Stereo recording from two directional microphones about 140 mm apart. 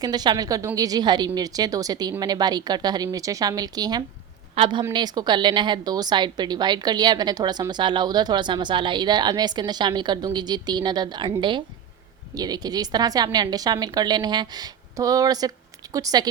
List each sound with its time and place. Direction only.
0.0 s a woman's voice: 30° right (ahead or behind)
4.5 s a woman's voice: 40° right (ahead or behind)
4.8 s a woman's voice: 30° right (ahead or behind)